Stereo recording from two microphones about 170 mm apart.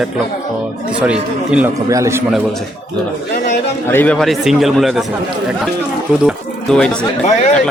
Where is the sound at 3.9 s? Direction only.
10° left (ahead or behind).